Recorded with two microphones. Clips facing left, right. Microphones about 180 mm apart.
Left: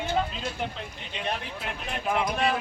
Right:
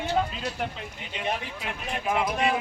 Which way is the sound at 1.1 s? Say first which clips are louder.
Right 2 dB; 5° right (ahead or behind).